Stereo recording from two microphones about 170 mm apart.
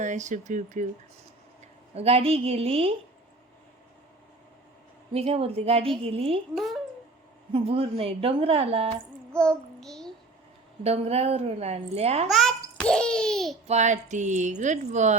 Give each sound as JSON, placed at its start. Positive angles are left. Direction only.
{"t": 0.0, "sound": "speech", "side_deg": -45}
{"t": 2.0, "sound": "a woman's voice", "side_deg": -35}
{"t": 5.1, "sound": "a woman's voice", "side_deg": -35}
{"t": 7.5, "sound": "a woman's voice", "side_deg": -35}
{"t": 9.4, "sound": "child singing", "side_deg": 5}
{"t": 10.8, "sound": "a woman's voice", "side_deg": -35}
{"t": 12.3, "sound": "a sound", "side_deg": 0}
{"t": 13.7, "sound": "speech", "side_deg": -45}